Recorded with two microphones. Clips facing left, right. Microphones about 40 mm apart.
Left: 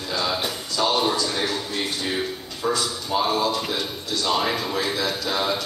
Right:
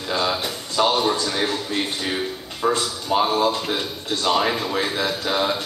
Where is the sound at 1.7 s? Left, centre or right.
Right.